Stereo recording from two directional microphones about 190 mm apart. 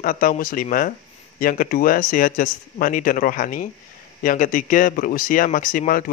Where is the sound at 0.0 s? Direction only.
45° left (ahead or behind).